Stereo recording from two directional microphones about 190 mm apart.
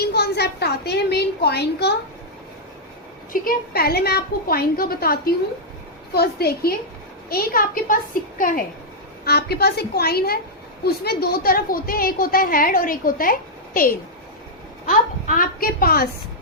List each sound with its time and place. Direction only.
0.1 s a woman's voice: 60° left (ahead or behind)
3.4 s a woman's voice: 55° left (ahead or behind)